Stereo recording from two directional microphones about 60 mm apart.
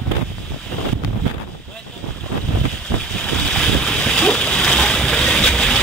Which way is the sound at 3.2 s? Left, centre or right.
Centre.